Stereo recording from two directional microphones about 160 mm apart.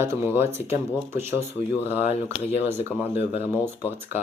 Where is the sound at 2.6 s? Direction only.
15° right (ahead or behind).